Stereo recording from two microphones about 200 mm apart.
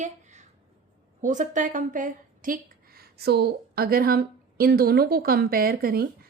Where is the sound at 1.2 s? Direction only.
40° right (ahead or behind).